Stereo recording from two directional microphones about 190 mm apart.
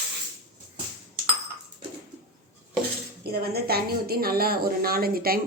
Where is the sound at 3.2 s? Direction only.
55° right (ahead or behind).